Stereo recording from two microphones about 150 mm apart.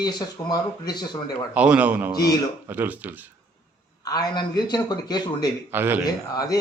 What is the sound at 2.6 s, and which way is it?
Speech, 10° right (ahead or behind).